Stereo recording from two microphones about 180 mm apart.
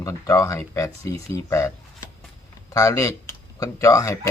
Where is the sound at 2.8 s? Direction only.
15° left (ahead or behind).